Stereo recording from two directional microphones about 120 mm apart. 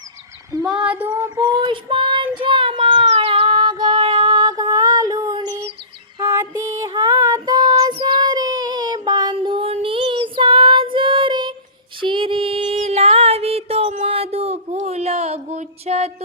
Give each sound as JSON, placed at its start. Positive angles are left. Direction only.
{"t": 0.5, "sound": "female singing", "side_deg": -30}
{"t": 0.9, "sound": "child singing", "side_deg": -15}
{"t": 1.6, "sound": "child singing", "side_deg": -45}
{"t": 3.2, "sound": "female singing", "side_deg": -55}
{"t": 3.6, "sound": "female singing", "side_deg": -40}
{"t": 4.3, "sound": "music", "side_deg": -35}
{"t": 6.9, "sound": "child singing", "side_deg": -30}
{"t": 11.9, "sound": "music", "side_deg": -45}
{"t": 14.1, "sound": "a sound", "side_deg": -55}